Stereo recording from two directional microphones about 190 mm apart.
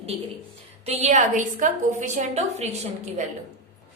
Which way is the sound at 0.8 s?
35° right (ahead or behind).